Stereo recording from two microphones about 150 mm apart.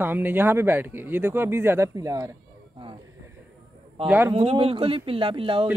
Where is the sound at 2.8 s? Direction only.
35° right (ahead or behind).